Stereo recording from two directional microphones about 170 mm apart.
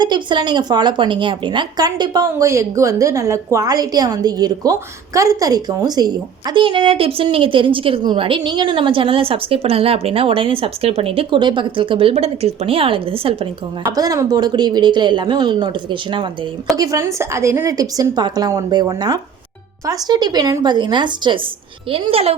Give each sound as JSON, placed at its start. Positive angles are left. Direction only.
{"t": 0.0, "sound": "a woman's voice", "side_deg": -25}
{"t": 13.9, "sound": "a woman's voice", "side_deg": -20}